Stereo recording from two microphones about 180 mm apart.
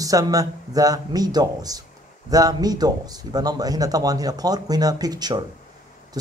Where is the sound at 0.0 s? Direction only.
20° right (ahead or behind).